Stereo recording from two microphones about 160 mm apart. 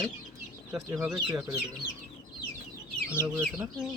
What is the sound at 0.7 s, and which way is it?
Speech, 15° right (ahead or behind).